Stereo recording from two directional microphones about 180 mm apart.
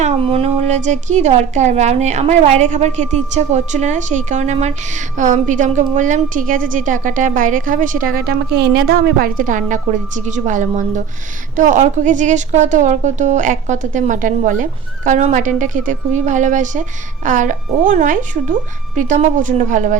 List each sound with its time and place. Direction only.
0.0 s a woman's voice: 30° right (ahead or behind)